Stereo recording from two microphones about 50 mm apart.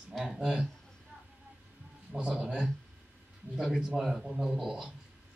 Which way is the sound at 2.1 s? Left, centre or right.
Right.